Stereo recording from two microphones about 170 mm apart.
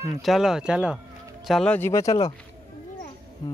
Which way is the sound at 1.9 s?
20° left (ahead or behind).